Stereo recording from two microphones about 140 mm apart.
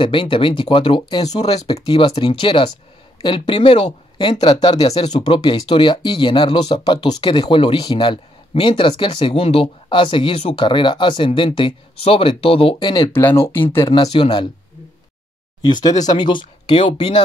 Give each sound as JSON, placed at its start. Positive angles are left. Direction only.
{"t": 0.0, "sound": "speech", "side_deg": 40}
{"t": 12.9, "sound": "speech", "side_deg": 20}
{"t": 14.1, "sound": "speech", "side_deg": 35}
{"t": 15.6, "sound": "speech", "side_deg": 30}